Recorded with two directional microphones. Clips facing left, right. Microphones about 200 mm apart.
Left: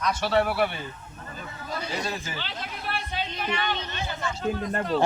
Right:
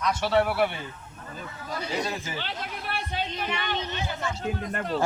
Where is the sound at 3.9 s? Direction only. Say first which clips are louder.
Right 1 dB; 10° right (ahead or behind).